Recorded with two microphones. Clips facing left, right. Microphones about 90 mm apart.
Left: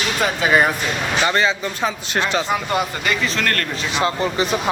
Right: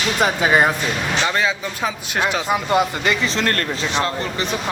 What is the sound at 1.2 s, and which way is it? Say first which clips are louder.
Speech: left 3 dB; centre (ahead or behind).